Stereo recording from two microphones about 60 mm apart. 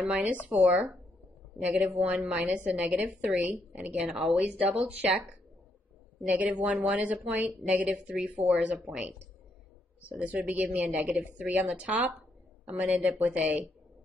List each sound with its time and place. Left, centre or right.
0.0 s speech: right
6.2 s speech: right